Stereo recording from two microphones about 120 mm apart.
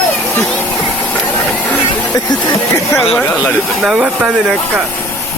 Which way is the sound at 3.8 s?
5° right (ahead or behind).